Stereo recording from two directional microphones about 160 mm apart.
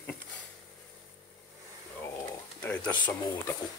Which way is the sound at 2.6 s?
10° left (ahead or behind).